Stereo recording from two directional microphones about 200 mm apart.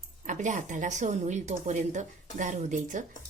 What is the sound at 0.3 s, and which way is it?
A woman's voice, 40° right (ahead or behind).